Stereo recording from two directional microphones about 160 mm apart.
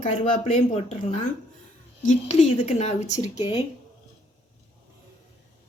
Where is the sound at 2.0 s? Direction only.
45° left (ahead or behind).